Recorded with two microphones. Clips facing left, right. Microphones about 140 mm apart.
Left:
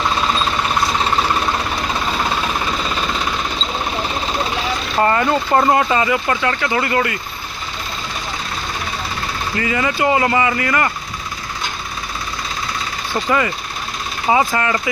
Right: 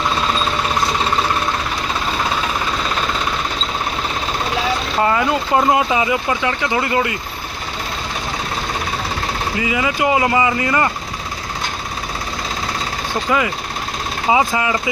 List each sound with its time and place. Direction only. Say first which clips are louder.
4.9 s speech: left 2 dB; 5° right (ahead or behind)
9.6 s speech: left 1 dB; 10° right (ahead or behind)
14.3 s speech: even; 10° right (ahead or behind)